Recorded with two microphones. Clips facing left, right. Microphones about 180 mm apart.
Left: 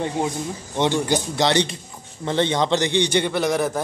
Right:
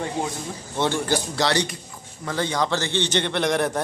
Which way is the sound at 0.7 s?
15° left (ahead or behind).